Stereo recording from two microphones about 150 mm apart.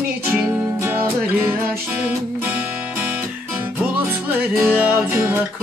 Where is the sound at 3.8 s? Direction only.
15° right (ahead or behind).